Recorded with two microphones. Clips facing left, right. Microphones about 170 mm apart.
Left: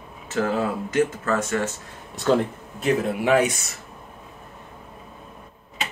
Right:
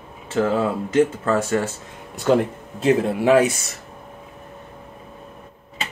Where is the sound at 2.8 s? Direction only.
30° right (ahead or behind).